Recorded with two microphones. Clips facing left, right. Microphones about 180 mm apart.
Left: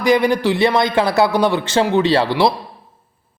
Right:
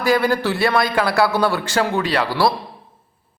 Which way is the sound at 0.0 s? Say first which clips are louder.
Left 3 dB; 15° left (ahead or behind).